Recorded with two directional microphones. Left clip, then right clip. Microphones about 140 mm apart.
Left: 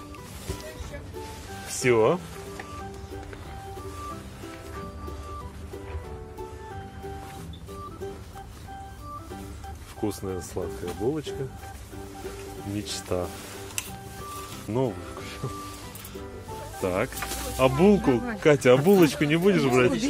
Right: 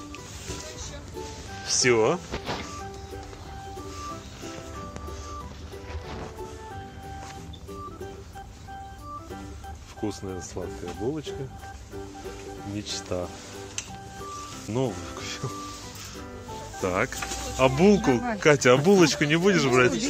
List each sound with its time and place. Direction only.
1.8 s speech: 15° left (ahead or behind)
10.0 s speech: 10° left (ahead or behind)
12.7 s speech: 10° left (ahead or behind)
14.7 s speech: centre (ahead or behind)
16.7 s speech: centre (ahead or behind)